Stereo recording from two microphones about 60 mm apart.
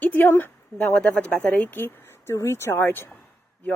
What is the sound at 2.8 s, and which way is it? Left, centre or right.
Speech, left.